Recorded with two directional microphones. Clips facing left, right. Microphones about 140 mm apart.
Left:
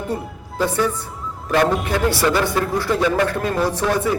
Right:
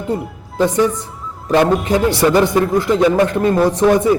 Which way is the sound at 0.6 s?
20° right (ahead or behind).